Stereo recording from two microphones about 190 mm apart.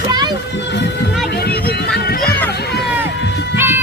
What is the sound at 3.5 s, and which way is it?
Music, 10° right (ahead or behind).